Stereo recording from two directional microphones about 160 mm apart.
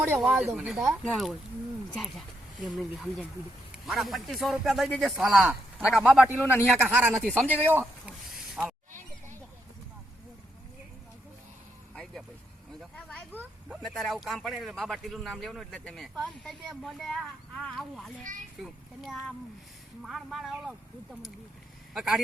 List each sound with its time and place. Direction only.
0.2 s a man's voice: centre (ahead or behind)
6.4 s speech: 15° left (ahead or behind)
6.8 s speech: 15° right (ahead or behind)
7.3 s speech: 10° left (ahead or behind)
7.7 s speech: 15° right (ahead or behind)
8.4 s a sound: centre (ahead or behind)
12.8 s a sound: 5° left (ahead or behind)
13.7 s a man's voice: centre (ahead or behind)
18.2 s a child's voice: 55° right (ahead or behind)
18.6 s a man's voice: centre (ahead or behind)
21.9 s a man's voice: centre (ahead or behind)